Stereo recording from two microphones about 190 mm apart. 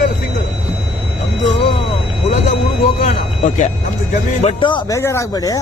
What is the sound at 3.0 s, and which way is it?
Speech, 40° left (ahead or behind).